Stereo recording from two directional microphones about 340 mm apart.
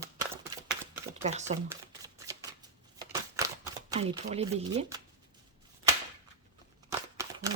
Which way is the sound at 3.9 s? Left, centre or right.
Centre.